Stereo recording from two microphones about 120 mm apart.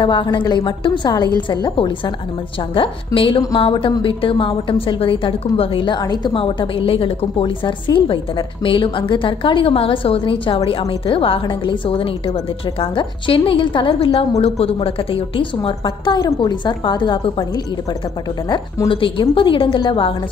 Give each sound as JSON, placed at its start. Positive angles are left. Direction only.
{"t": 0.0, "sound": "a woman's voice", "side_deg": 40}
{"t": 3.2, "sound": "a woman's voice", "side_deg": 45}
{"t": 6.3, "sound": "a woman's voice", "side_deg": 45}
{"t": 18.9, "sound": "a woman's voice", "side_deg": 45}